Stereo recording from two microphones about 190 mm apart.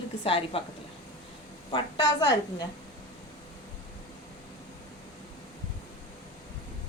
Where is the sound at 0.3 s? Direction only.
30° left (ahead or behind).